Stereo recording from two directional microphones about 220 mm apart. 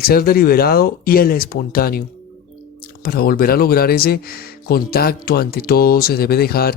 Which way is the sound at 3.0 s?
40° left (ahead or behind).